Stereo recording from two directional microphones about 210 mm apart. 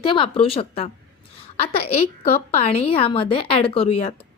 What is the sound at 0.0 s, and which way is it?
A woman's voice, 25° left (ahead or behind).